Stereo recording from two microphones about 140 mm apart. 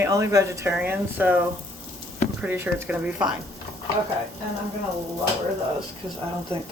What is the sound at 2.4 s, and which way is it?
Speech, 15° right (ahead or behind).